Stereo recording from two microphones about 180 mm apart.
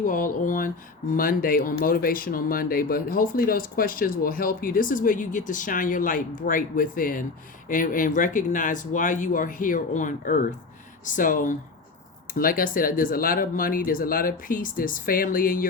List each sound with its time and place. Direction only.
0.0 s speech: 50° left (ahead or behind)